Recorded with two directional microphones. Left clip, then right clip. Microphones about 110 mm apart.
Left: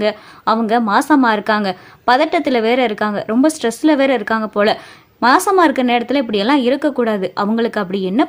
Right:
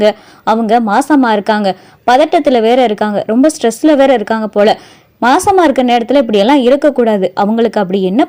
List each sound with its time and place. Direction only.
0.0 s a woman's voice: 30° right (ahead or behind)